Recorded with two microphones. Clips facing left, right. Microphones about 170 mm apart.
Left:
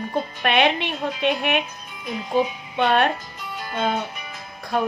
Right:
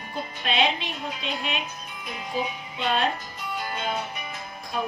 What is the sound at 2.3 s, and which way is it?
Music, 65° left (ahead or behind).